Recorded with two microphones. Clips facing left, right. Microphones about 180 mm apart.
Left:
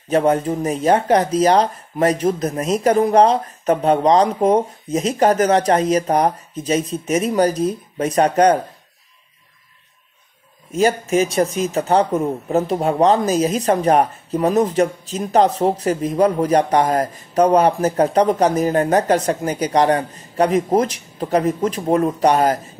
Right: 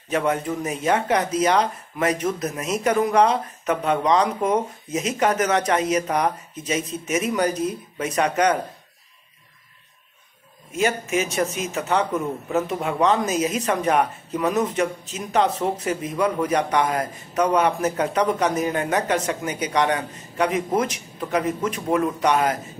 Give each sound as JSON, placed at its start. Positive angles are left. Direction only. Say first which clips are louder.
{"t": 0.1, "sound": "speech", "louder": "left 6 dB", "side_deg": 35}
{"t": 10.7, "sound": "speech", "louder": "left 6 dB", "side_deg": 35}